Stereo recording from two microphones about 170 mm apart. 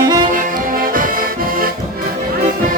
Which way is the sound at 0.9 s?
55° right (ahead or behind).